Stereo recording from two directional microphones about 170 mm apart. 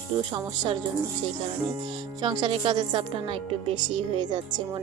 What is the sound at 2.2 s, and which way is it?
A woman's voice, 25° right (ahead or behind).